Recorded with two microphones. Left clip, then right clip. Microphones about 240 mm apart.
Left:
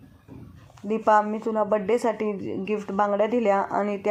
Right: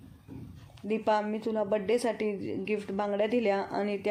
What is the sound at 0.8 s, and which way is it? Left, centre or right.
Speech, centre.